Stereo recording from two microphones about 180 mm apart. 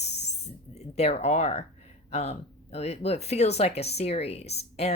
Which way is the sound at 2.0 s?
35° left (ahead or behind).